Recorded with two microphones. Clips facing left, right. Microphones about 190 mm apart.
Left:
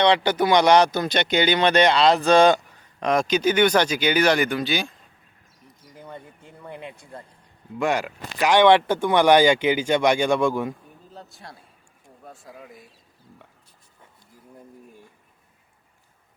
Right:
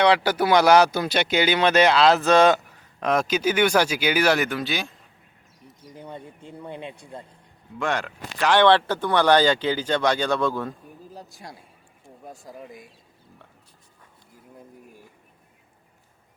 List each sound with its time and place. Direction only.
0.0 s speech: 5° right (ahead or behind)
5.9 s a sound: 25° right (ahead or behind)
6.6 s speech: 25° right (ahead or behind)
7.8 s speech: 10° left (ahead or behind)
11.1 s a man's voice: centre (ahead or behind)